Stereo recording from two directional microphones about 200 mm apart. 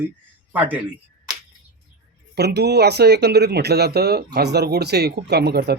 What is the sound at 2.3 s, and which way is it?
Speech, 55° right (ahead or behind).